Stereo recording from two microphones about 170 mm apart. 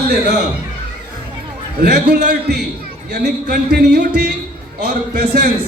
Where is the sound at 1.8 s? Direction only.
75° right (ahead or behind); by 5.5 s 55° right (ahead or behind).